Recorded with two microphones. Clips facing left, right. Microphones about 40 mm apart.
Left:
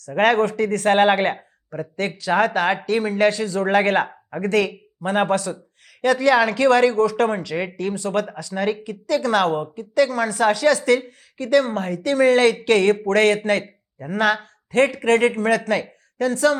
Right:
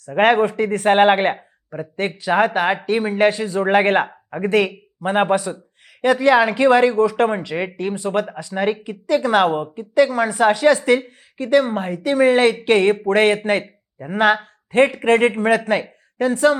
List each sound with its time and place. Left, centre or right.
0.2 s speech: centre